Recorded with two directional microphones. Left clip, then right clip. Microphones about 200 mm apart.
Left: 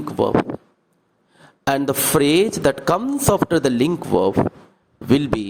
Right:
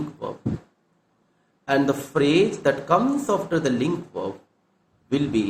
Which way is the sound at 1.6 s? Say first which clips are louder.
Left 2 dB; 55° left (ahead or behind).